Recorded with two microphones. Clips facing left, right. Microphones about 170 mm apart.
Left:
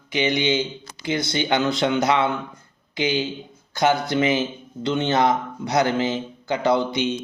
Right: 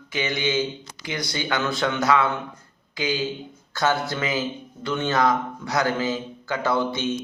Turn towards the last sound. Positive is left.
turn(degrees=15)  # may be behind; listen again after turning